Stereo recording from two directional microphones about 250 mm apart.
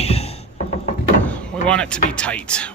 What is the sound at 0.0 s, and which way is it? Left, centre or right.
Music, left.